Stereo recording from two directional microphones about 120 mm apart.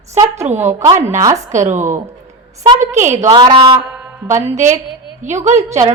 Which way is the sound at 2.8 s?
80° right.